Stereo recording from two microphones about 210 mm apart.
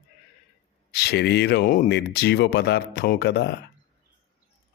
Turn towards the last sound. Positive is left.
turn(degrees=50)  # may be behind; listen again after turning